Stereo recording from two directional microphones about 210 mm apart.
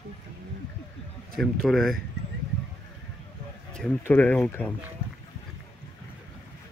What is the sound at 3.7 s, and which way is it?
Speech, 5° left (ahead or behind).